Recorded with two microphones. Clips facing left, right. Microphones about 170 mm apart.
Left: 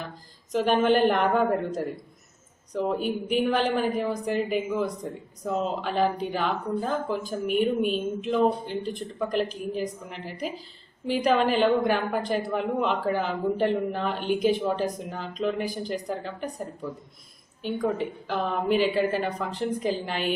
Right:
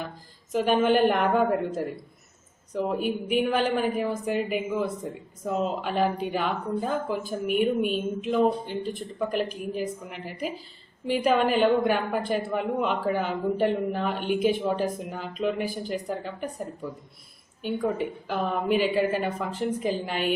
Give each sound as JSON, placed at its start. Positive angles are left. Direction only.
{"t": 0.5, "sound": "a man's voice", "side_deg": 0}
{"t": 15.5, "sound": "speech", "side_deg": 40}
{"t": 15.9, "sound": "a man's voice", "side_deg": -5}
{"t": 17.6, "sound": "a woman's voice", "side_deg": -5}